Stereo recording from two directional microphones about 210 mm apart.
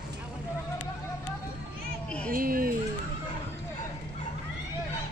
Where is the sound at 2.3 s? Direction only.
40° right (ahead or behind).